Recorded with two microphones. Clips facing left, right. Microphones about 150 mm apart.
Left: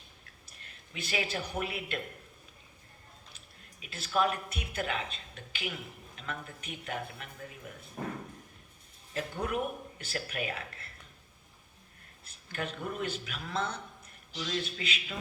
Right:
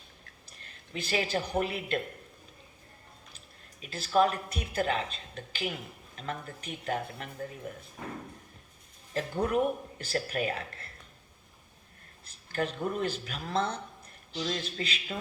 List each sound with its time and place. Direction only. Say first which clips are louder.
0.6 s speech: right 4 dB; 35° right (ahead or behind)
3.8 s speech: right 5 dB; 40° right (ahead or behind)
9.1 s speech: right 5 dB; 35° right (ahead or behind)
12.5 s speech: right 5 dB; 40° right (ahead or behind)